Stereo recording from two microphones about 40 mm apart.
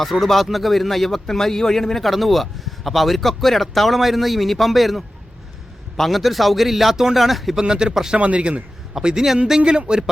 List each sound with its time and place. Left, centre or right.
0.0 s a man's voice: centre
7.5 s speech: centre
8.2 s speech: right
8.9 s speech: centre
9.6 s speech: right